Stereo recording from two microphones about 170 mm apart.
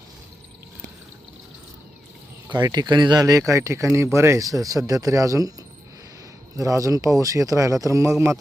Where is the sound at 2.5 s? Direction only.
25° right (ahead or behind).